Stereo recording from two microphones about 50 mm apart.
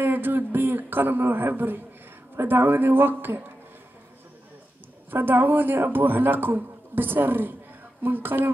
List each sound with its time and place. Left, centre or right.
0.0 s speech: right
5.1 s speech: right